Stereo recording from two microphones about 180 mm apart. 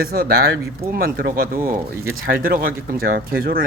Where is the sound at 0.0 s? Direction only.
55° right (ahead or behind).